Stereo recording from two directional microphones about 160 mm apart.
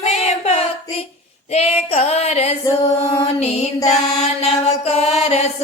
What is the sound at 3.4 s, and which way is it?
Music, 45° left (ahead or behind).